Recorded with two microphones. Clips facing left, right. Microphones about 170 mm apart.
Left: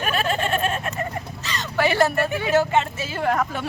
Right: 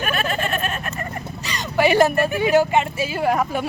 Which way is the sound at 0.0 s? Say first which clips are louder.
Even; 30° left (ahead or behind).